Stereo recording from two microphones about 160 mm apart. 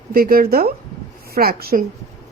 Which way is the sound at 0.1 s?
70° right (ahead or behind).